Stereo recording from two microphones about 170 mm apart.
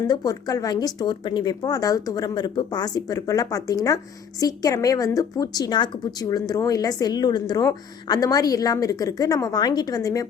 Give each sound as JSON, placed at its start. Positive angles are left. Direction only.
{"t": 0.1, "sound": "speech", "side_deg": 25}